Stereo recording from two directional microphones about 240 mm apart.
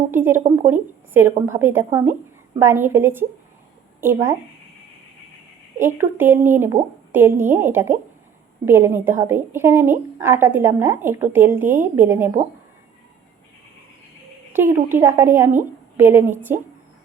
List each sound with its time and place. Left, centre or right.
0.1 s a woman's voice: centre
5.8 s a woman's voice: centre
14.5 s a woman's voice: centre